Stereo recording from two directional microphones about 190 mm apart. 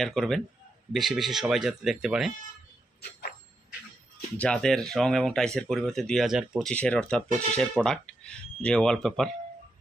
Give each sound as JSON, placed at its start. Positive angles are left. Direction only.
{"t": 0.0, "sound": "speech", "side_deg": 0}
{"t": 3.0, "sound": "a sound", "side_deg": 55}
{"t": 4.4, "sound": "speech", "side_deg": 5}